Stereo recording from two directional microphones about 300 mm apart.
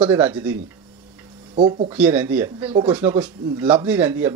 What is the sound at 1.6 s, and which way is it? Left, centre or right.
Speech, centre.